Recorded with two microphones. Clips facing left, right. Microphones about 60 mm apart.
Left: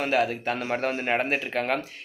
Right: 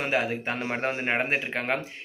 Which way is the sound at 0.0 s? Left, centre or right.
Right.